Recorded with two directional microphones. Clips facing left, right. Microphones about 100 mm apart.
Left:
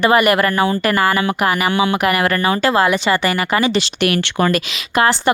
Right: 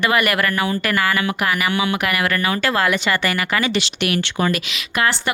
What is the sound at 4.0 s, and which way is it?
Speech, 50° left (ahead or behind).